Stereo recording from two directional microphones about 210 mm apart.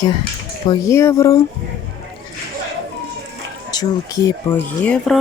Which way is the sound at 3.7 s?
20° left (ahead or behind).